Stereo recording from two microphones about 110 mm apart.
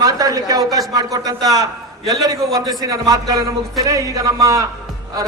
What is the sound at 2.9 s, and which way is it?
Speech, 35° right (ahead or behind).